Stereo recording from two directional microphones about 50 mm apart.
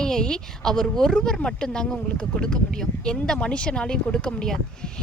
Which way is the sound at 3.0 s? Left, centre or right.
Centre.